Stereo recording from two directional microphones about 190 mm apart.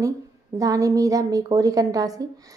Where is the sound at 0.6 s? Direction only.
20° right (ahead or behind).